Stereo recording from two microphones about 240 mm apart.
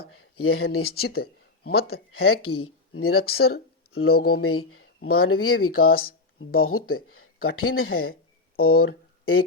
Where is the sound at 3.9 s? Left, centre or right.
Left.